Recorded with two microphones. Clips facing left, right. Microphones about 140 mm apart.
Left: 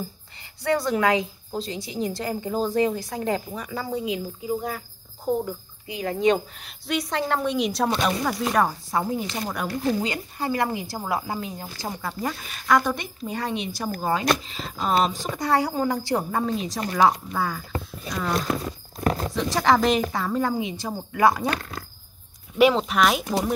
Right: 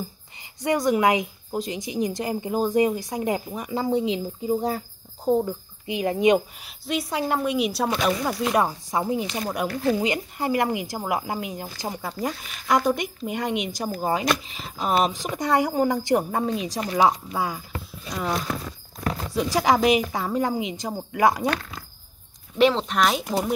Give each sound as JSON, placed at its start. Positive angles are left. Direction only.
{"t": 0.6, "sound": "speech", "side_deg": -15}
{"t": 6.6, "sound": "speech", "side_deg": -5}
{"t": 8.9, "sound": "a woman's voice", "side_deg": -15}
{"t": 19.0, "sound": "a sound", "side_deg": 40}
{"t": 19.3, "sound": "speech", "side_deg": -10}
{"t": 22.6, "sound": "speech", "side_deg": 5}